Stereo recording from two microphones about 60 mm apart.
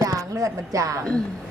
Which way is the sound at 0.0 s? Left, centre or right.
Right.